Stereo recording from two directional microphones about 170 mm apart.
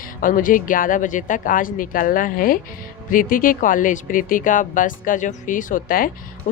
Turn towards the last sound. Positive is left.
turn(degrees=55)  # may be behind; listen again after turning